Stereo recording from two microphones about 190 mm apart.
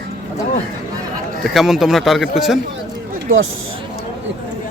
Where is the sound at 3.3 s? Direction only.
90° right.